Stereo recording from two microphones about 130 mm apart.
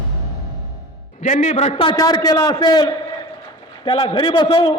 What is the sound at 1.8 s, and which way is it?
A man's voice, 30° left (ahead or behind).